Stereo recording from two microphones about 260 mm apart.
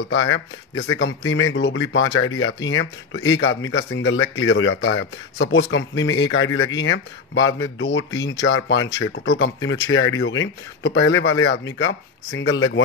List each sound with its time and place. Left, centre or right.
0.1 s speech: left